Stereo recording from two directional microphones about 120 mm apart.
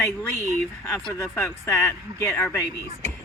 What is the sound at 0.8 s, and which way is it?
Speech, 25° left (ahead or behind).